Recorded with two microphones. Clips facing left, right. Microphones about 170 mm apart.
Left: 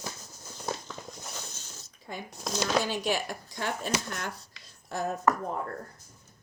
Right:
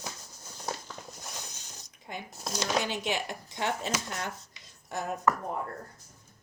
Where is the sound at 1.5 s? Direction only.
15° right (ahead or behind).